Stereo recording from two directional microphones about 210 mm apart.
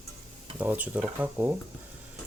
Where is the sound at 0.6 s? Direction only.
5° right (ahead or behind).